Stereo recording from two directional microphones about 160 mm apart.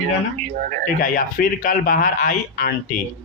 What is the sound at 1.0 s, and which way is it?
A man's voice, 60° left (ahead or behind).